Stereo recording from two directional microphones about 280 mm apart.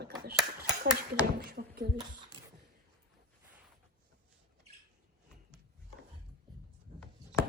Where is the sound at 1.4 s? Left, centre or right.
Right.